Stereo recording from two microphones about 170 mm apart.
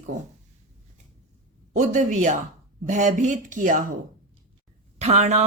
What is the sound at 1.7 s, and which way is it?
A woman's voice, 45° right (ahead or behind).